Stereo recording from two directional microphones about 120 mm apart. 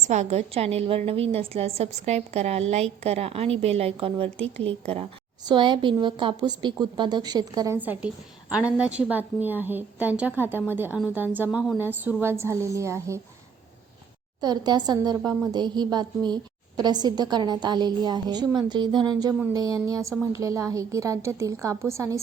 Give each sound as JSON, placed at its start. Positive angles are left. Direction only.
{"t": 0.1, "sound": "a woman's voice", "side_deg": -70}
{"t": 5.5, "sound": "a woman's voice", "side_deg": -40}
{"t": 7.8, "sound": "a woman's voice", "side_deg": -15}
{"t": 14.4, "sound": "a woman's voice", "side_deg": -35}